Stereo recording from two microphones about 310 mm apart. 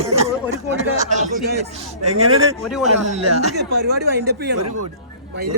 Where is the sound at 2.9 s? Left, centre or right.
Right.